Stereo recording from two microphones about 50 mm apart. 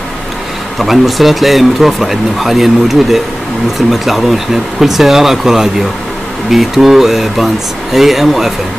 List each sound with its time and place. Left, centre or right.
0.7 s speech: centre